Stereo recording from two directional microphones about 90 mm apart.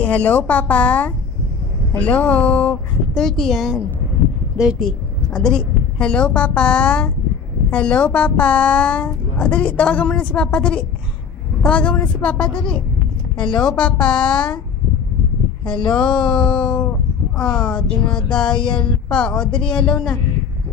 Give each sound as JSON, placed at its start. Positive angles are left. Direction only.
{"t": 0.0, "sound": "speech", "side_deg": 15}
{"t": 3.2, "sound": "a woman's voice", "side_deg": 0}
{"t": 15.9, "sound": "speech", "side_deg": 10}